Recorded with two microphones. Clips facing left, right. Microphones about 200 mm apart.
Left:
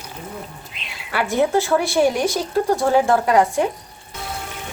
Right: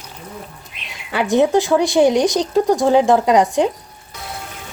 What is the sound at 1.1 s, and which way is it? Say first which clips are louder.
Speech: right 4 dB; 20° right (ahead or behind).